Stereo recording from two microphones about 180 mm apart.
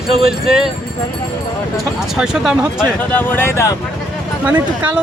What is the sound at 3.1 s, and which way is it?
Speech, 10° left (ahead or behind).